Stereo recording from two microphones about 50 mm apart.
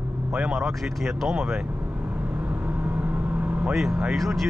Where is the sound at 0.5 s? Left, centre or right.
Centre.